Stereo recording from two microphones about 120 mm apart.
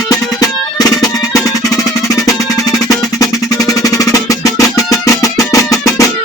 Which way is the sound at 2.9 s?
30° left (ahead or behind).